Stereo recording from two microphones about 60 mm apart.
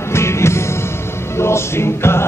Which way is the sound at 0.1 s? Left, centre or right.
Left.